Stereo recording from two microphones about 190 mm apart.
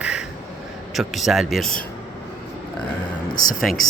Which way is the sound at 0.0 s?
5° right (ahead or behind).